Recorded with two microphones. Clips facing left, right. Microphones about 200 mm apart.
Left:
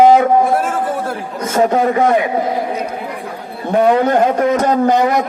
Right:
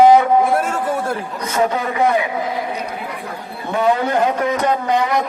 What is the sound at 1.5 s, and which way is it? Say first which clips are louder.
Speech: left 6 dB; 45° left (ahead or behind).